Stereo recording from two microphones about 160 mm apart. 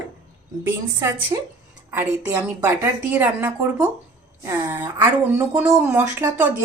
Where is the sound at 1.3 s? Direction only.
25° right (ahead or behind).